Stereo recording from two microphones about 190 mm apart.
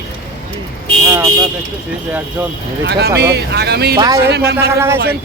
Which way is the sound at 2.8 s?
60° right (ahead or behind).